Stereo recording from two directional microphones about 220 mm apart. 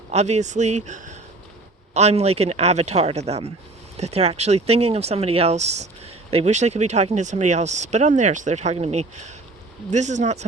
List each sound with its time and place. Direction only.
0.1 s speech: 30° right (ahead or behind)